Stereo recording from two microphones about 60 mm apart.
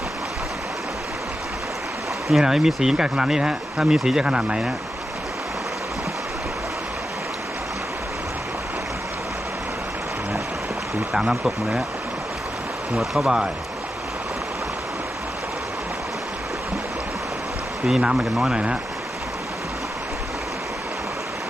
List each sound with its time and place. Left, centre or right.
2.3 s speech: centre
11.1 s speech: centre
13.2 s speech: centre
17.8 s speech: centre